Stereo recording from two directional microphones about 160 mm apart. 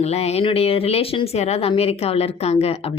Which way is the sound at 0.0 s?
40° left (ahead or behind).